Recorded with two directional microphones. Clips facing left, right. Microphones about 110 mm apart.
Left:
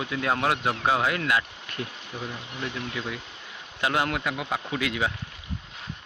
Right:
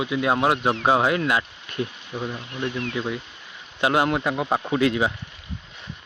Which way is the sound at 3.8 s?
25° right (ahead or behind).